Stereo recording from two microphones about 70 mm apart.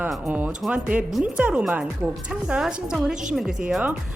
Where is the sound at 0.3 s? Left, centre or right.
Centre.